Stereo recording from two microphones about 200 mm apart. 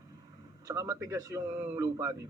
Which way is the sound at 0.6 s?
15° right (ahead or behind).